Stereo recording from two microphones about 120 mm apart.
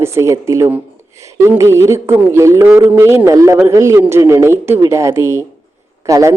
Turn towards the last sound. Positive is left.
turn(degrees=-25)  # may be behind; listen again after turning